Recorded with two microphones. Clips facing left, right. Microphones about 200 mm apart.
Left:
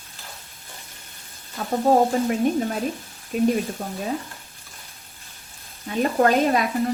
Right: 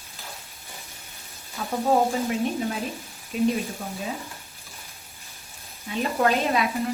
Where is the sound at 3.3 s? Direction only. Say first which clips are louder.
Left 3 dB; 45° left (ahead or behind).